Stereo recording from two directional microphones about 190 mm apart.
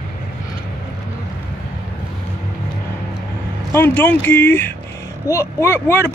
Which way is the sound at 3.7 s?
10° left (ahead or behind).